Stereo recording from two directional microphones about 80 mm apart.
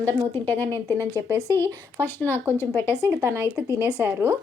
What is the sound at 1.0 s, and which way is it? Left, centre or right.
A woman's voice, right.